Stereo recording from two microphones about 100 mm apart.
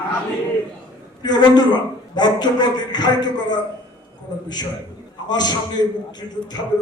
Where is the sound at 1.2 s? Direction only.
45° left (ahead or behind).